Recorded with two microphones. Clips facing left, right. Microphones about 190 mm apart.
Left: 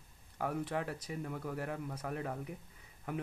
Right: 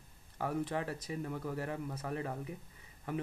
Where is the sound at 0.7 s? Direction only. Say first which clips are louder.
Even; 10° left (ahead or behind).